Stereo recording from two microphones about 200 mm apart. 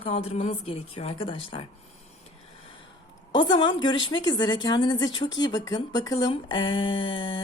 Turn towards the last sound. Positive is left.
turn(degrees=25)  # may be behind; listen again after turning